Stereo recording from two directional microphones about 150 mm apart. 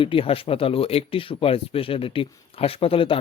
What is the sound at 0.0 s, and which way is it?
Speech, 35° left (ahead or behind).